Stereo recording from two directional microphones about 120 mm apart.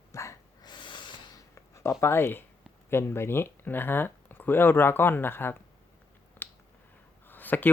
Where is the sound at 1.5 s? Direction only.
25° left (ahead or behind).